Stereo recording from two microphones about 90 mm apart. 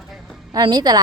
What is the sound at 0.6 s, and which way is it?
Speech, 55° right (ahead or behind).